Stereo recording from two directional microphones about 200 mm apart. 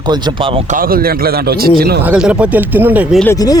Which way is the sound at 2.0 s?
5° right (ahead or behind).